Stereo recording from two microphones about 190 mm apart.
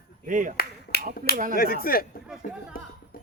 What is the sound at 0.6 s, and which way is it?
Finger snapping, 55° left (ahead or behind).